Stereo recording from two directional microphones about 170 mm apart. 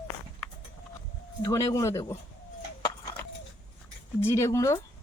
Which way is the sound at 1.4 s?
20° left (ahead or behind).